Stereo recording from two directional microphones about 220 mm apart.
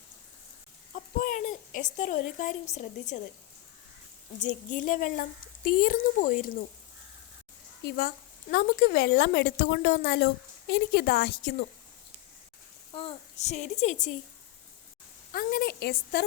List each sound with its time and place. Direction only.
0.9 s a woman's voice: 35° left (ahead or behind)
4.4 s a woman's voice: 35° left (ahead or behind)
7.9 s a woman's voice: 45° left (ahead or behind)
12.9 s a woman's voice: 25° left (ahead or behind)
15.3 s a woman's voice: 40° left (ahead or behind)